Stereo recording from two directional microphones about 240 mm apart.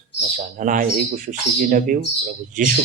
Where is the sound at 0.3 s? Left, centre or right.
Right.